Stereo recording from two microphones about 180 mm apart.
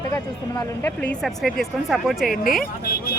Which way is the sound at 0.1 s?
15° left (ahead or behind).